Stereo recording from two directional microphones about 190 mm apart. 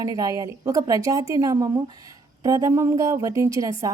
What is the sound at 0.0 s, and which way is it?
A woman's voice, 20° right (ahead or behind).